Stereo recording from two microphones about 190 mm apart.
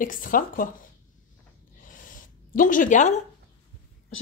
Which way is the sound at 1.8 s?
45° left (ahead or behind).